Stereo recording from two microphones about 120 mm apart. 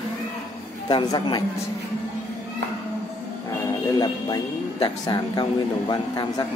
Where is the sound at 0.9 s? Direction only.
40° left (ahead or behind).